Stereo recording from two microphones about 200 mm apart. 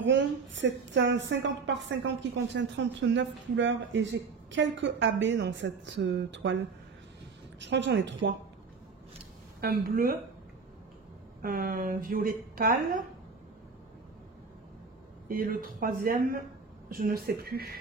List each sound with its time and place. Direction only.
0.0 s a woman's voice: 60° right (ahead or behind)
7.6 s a woman's voice: 60° right (ahead or behind)
9.6 s speech: 50° right (ahead or behind)
11.4 s speech: 45° right (ahead or behind)
15.2 s speech: 45° right (ahead or behind)